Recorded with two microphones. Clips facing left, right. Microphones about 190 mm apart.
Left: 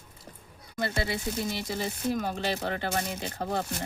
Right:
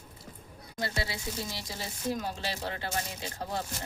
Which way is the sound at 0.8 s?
55° left (ahead or behind).